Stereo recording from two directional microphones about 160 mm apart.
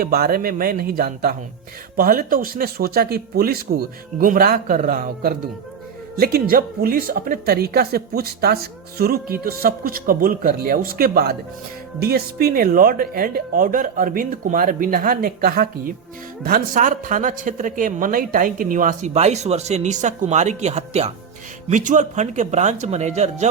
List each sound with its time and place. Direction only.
0.0 s speech: 70° right (ahead or behind)
4.2 s speech: 60° right (ahead or behind)
6.1 s a man's voice: 70° right (ahead or behind); by 23.5 s 45° right (ahead or behind)